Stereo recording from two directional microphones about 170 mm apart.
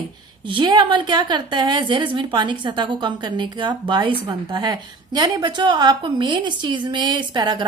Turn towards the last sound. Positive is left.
turn(degrees=-25)  # may be behind; listen again after turning